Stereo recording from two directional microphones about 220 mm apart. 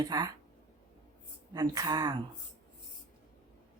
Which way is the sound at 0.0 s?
20° right (ahead or behind).